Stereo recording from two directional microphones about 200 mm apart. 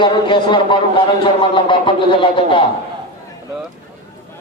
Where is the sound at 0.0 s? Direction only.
25° left (ahead or behind).